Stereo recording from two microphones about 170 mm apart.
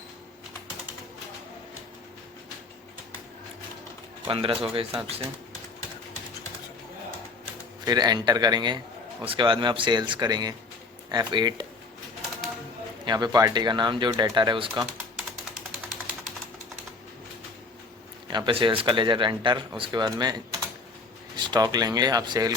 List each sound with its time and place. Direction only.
4.3 s speech: 30° right (ahead or behind)
7.9 s speech: 25° right (ahead or behind)
13.1 s speech: 25° right (ahead or behind)
18.3 s speech: 30° right (ahead or behind)